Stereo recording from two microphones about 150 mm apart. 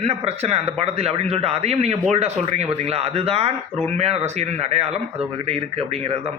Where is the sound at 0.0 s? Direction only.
45° right (ahead or behind).